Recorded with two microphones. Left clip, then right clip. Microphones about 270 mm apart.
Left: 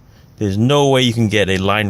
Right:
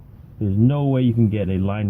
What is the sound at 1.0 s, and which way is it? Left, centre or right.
Speech, left.